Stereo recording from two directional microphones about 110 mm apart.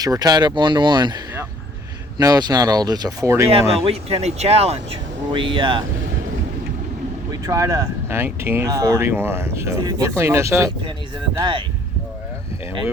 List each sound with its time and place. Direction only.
0.0 s speech: 35° right (ahead or behind)
3.7 s speech: 60° right (ahead or behind)
5.3 s speech: 50° right (ahead or behind)
7.3 s speech: 30° right (ahead or behind)